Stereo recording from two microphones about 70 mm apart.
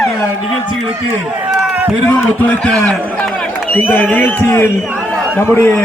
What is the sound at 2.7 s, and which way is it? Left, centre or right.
Speech, centre.